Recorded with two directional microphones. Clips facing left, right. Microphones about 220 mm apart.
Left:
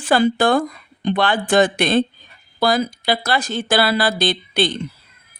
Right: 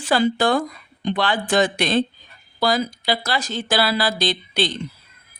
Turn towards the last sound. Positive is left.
turn(degrees=55)  # may be behind; listen again after turning